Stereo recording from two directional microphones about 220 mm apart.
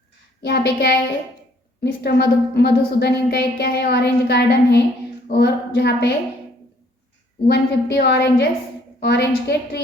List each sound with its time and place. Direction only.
0.4 s a woman's voice: 50° left (ahead or behind)
7.4 s a woman's voice: 50° left (ahead or behind)